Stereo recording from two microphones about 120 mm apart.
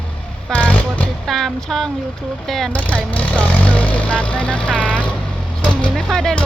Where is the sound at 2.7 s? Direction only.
15° left (ahead or behind).